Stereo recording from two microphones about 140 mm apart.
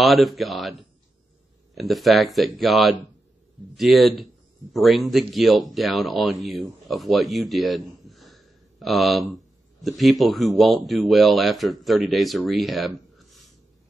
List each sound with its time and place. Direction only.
0.0 s speech: centre (ahead or behind)
1.8 s speech: centre (ahead or behind)
13.1 s a sound: centre (ahead or behind)